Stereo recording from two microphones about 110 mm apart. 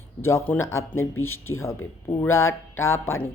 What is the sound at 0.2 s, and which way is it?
Speech, 20° left (ahead or behind).